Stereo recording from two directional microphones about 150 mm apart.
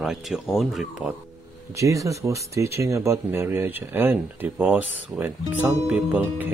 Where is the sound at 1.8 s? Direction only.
20° right (ahead or behind).